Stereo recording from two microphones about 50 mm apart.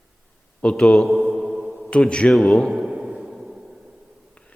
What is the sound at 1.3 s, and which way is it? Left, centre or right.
Music, centre.